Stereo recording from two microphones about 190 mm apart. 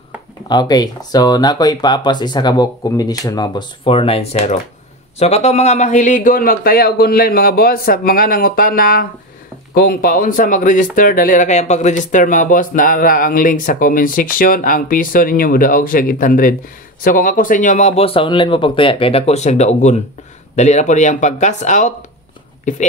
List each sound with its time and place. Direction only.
0.5 s speech: 20° left (ahead or behind); by 22.8 s 40° left (ahead or behind)